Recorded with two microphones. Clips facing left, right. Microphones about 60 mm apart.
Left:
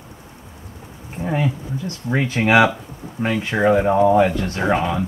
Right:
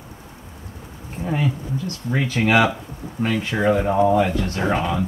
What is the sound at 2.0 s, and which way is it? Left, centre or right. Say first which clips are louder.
Speech: left 2 dB; left.